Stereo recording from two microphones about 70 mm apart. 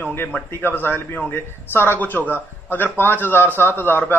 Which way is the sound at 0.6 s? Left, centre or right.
Left.